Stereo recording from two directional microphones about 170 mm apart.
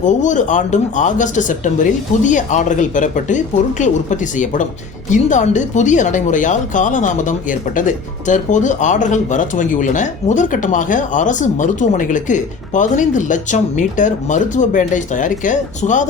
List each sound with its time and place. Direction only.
0.0 s speech: 45° left (ahead or behind)